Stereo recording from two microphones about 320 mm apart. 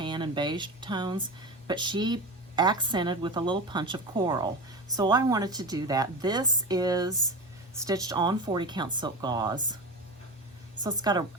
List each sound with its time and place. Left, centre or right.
0.0 s a woman's voice: centre
10.8 s a woman's voice: centre